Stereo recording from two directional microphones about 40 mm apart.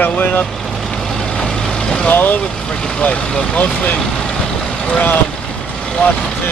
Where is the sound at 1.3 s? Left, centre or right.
Centre.